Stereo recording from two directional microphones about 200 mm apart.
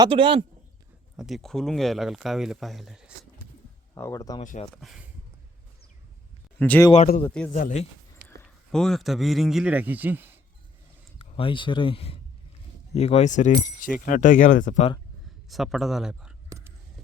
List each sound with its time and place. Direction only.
0.0 s a man's voice: 25° right (ahead or behind)
1.1 s speech: centre (ahead or behind)
3.9 s speech: 15° left (ahead or behind)
4.4 s speech: 35° left (ahead or behind)
4.7 s speech: centre (ahead or behind)
6.6 s speech: 10° left (ahead or behind)
7.5 s speech: 35° left (ahead or behind)
8.4 s speech: 5° left (ahead or behind)
11.2 s speech: 25° left (ahead or behind)
15.4 s speech: centre (ahead or behind)
16.5 s whispering: 15° right (ahead or behind)